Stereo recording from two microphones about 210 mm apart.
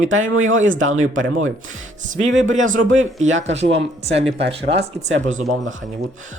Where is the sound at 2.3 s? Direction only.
65° right (ahead or behind).